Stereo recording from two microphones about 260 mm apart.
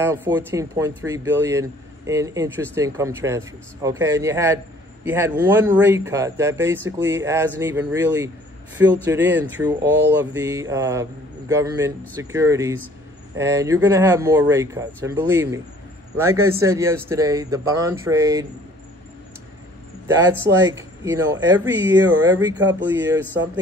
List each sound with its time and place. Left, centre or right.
0.0 s speech: centre
20.2 s speech: centre